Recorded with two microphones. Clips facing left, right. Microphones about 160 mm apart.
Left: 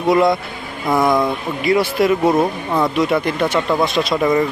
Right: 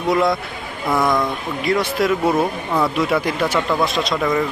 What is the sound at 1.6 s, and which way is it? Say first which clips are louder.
Speech: left 3 dB; centre (ahead or behind).